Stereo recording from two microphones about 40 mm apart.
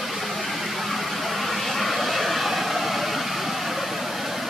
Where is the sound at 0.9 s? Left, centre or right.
Centre.